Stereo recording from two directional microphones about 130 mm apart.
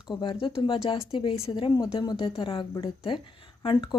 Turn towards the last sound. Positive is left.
turn(degrees=40)  # may be behind; listen again after turning